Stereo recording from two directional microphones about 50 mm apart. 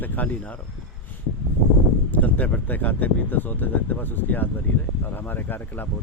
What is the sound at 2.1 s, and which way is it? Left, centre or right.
Speech, left.